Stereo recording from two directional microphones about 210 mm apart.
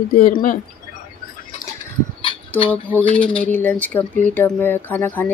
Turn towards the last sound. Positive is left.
turn(degrees=10)  # may be behind; listen again after turning